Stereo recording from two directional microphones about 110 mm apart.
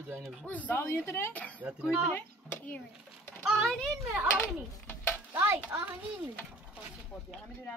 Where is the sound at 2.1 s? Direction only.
10° left (ahead or behind).